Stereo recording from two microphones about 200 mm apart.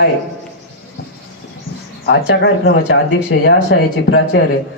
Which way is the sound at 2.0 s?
60° left (ahead or behind).